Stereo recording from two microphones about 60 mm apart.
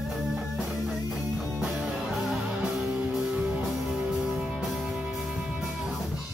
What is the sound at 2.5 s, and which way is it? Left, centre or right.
Music, centre.